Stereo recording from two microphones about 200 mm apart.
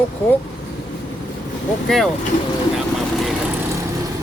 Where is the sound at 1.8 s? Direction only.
Centre (ahead or behind).